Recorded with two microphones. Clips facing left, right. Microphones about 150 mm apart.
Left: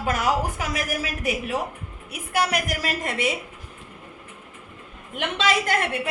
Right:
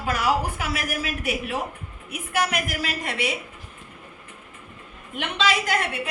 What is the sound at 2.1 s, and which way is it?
A woman's voice, 35° left (ahead or behind).